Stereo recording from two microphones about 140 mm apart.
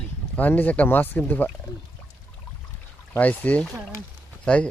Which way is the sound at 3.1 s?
10° left (ahead or behind).